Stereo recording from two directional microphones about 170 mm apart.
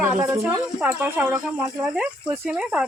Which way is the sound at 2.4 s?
5° right (ahead or behind).